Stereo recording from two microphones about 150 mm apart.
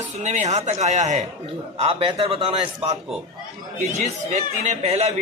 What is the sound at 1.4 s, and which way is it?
A man's voice, 35° right (ahead or behind).